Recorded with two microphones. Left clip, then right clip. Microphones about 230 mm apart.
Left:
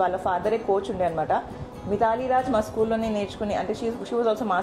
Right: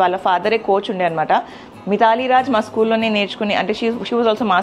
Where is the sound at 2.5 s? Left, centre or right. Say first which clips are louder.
Right 7 dB; right.